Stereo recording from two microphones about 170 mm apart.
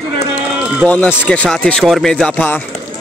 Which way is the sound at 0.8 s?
10° left (ahead or behind).